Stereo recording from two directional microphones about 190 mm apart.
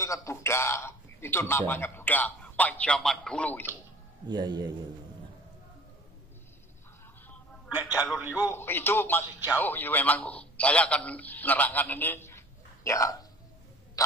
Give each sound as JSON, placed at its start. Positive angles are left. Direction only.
{"t": 0.0, "sound": "a man's voice", "side_deg": 15}
{"t": 4.3, "sound": "a man's voice", "side_deg": -20}
{"t": 7.9, "sound": "a man's voice", "side_deg": -10}
{"t": 8.5, "sound": "a man's voice", "side_deg": 10}